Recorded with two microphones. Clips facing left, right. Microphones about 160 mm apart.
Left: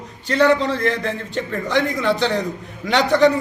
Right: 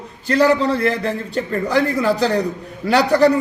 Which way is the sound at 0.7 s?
35° right (ahead or behind).